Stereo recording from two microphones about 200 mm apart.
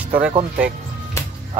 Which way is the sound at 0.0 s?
5° right (ahead or behind).